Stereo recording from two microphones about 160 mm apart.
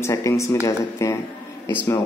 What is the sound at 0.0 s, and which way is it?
Speech, 20° left (ahead or behind).